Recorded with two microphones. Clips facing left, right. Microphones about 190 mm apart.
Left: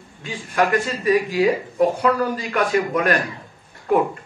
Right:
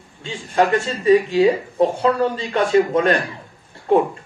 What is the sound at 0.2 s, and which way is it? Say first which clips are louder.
A man's voice: right 2 dB; 25° right (ahead or behind).